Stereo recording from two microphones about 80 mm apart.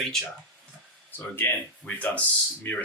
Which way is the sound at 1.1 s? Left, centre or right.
Left.